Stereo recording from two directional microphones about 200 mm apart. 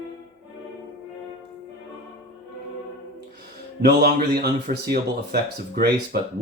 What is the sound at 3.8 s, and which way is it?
Speech, 50° right (ahead or behind).